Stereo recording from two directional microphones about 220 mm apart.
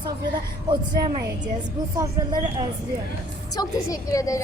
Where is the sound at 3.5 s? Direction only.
15° left (ahead or behind).